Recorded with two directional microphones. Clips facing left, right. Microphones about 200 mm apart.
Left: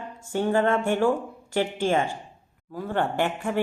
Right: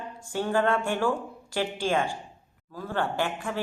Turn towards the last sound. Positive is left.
turn(degrees=20)  # may be behind; listen again after turning